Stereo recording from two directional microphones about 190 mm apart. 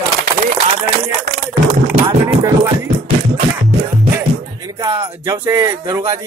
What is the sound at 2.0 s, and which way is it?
Speech, 15° right (ahead or behind).